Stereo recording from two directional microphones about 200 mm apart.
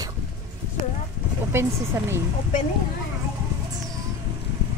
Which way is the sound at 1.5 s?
10° right (ahead or behind).